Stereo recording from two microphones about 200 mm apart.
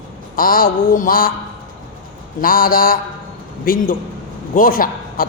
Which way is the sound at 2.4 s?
45° left (ahead or behind).